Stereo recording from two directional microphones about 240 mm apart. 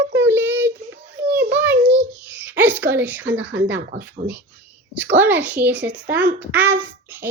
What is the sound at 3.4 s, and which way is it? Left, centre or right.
Speech, right.